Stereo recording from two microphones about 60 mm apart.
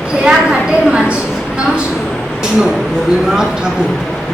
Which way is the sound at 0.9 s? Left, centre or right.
Centre.